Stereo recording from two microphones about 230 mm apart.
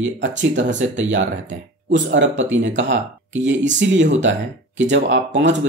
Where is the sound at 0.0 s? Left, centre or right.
Right.